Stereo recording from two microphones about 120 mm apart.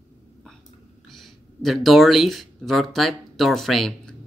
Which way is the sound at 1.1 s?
Centre (ahead or behind).